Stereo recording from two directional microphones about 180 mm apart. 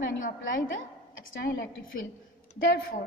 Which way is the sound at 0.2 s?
50° left (ahead or behind).